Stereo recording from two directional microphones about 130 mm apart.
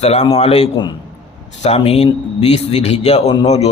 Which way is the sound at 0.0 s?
55° left (ahead or behind).